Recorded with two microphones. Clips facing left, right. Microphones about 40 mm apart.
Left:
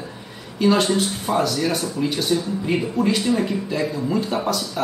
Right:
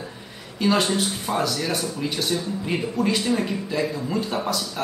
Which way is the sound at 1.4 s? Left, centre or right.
Centre.